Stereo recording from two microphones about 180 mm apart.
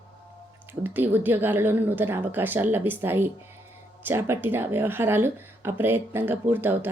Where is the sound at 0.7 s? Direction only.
10° right (ahead or behind).